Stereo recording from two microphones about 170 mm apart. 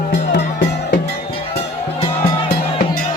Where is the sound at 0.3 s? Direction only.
70° left (ahead or behind).